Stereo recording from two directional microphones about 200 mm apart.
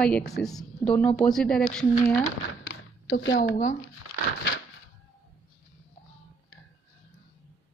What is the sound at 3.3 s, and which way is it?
Speech, 45° left (ahead or behind).